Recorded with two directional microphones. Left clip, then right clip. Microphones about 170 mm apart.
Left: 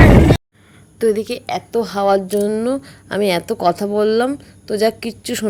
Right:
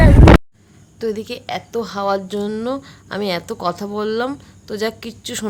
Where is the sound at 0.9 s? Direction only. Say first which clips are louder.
Left 7 dB; 20° left (ahead or behind).